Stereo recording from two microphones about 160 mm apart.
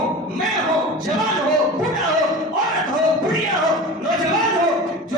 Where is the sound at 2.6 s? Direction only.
Centre (ahead or behind).